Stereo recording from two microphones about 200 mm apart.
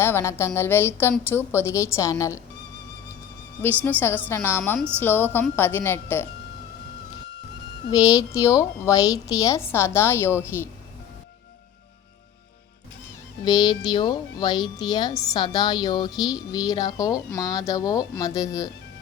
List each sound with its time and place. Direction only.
0.0 s a woman's voice: 10° left (ahead or behind)
3.8 s a woman's voice: 10° left (ahead or behind)
8.0 s a woman's voice: 15° left (ahead or behind)
13.4 s speech: 20° left (ahead or behind)